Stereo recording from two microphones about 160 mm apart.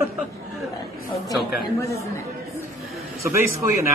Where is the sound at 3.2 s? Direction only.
15° right (ahead or behind).